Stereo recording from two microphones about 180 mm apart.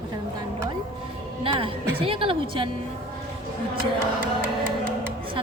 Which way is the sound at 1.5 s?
30° right (ahead or behind).